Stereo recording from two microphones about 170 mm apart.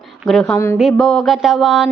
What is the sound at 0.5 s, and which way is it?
Speech, 15° left (ahead or behind).